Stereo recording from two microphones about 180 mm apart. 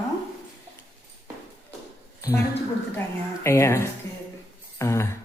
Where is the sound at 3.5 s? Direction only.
15° left (ahead or behind).